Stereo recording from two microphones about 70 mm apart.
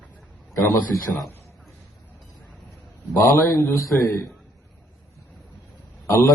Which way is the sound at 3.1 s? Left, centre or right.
Left.